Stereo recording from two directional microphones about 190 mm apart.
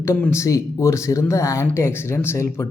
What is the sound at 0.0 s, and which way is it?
Speech, 15° left (ahead or behind).